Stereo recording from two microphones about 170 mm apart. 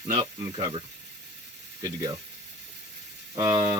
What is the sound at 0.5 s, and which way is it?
Speech, 30° right (ahead or behind).